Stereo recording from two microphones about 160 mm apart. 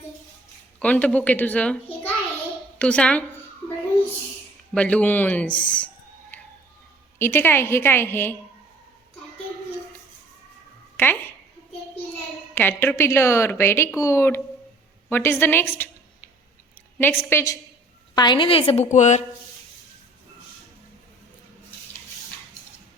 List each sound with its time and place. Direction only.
0.8 s a woman's voice: 10° left (ahead or behind)
4.7 s a woman's voice: 5° left (ahead or behind)
6.3 s a sound: 10° left (ahead or behind)
7.2 s a woman's voice: 15° left (ahead or behind)
10.9 s a sound: 10° left (ahead or behind)
12.5 s a woman's voice: 15° left (ahead or behind)
17.0 s a woman's voice: 15° left (ahead or behind); by 19.2 s 45° left (ahead or behind)